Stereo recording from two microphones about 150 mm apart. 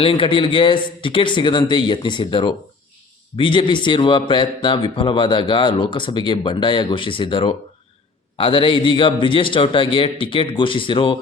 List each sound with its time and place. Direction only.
0.0 s speech: 35° left (ahead or behind)